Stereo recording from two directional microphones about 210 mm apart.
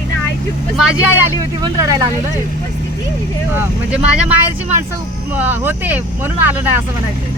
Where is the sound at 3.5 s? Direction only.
5° right (ahead or behind).